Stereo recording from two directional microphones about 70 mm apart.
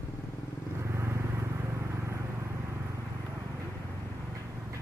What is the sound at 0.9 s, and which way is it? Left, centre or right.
Vehicle, right.